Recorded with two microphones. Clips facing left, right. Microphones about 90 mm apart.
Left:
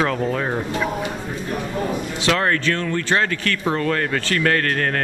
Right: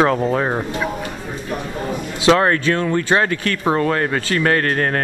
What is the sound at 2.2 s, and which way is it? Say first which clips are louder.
Speech: right 6 dB; 20° right (ahead or behind).